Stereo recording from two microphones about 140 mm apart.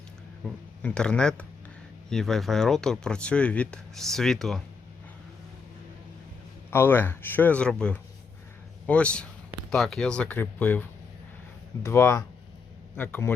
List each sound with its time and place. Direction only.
0.4 s speech: 10° left (ahead or behind)
6.7 s speech: 15° left (ahead or behind)